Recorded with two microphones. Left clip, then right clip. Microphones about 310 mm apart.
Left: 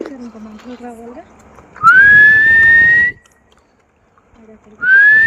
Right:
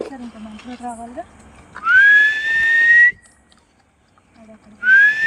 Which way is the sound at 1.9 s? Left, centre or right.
Centre.